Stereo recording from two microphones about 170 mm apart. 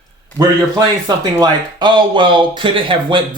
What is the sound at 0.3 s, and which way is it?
Speech, 25° right (ahead or behind).